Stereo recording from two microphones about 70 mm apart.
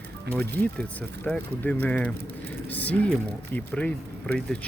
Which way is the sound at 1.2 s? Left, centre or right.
Left.